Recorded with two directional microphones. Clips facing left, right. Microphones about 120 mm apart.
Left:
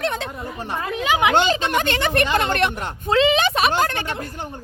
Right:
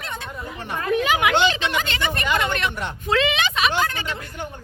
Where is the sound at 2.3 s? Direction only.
40° left (ahead or behind).